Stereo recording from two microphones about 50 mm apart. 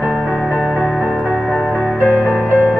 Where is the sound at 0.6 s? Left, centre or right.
Centre.